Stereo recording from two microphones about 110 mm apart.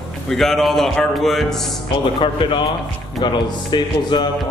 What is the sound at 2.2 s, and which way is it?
Music, 50° left (ahead or behind).